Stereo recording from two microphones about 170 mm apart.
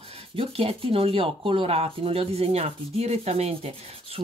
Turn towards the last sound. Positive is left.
turn(degrees=-35)  # may be behind; listen again after turning